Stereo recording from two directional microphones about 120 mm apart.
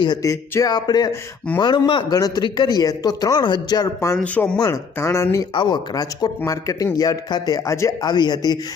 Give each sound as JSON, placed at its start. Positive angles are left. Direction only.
{"t": 0.0, "sound": "speech", "side_deg": 30}
{"t": 4.2, "sound": "speech", "side_deg": 10}
{"t": 4.6, "sound": "a man's voice", "side_deg": 25}
{"t": 5.5, "sound": "a man's voice", "side_deg": 40}
{"t": 8.0, "sound": "speech", "side_deg": 35}